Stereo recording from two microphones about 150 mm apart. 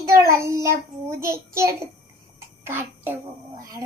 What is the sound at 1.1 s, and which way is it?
Speech, 20° right (ahead or behind).